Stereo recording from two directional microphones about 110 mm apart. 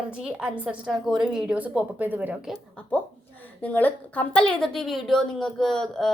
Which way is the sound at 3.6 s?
15° left (ahead or behind).